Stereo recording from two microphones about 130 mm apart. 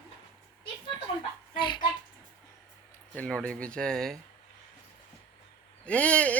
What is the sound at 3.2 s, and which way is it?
Speech, 5° left (ahead or behind).